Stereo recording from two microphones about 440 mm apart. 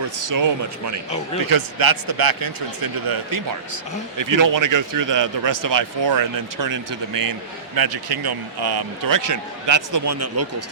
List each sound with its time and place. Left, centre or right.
0.2 s a man's voice: right